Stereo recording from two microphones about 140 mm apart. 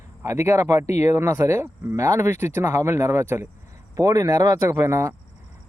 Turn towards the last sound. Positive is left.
turn(degrees=-20)  # may be behind; listen again after turning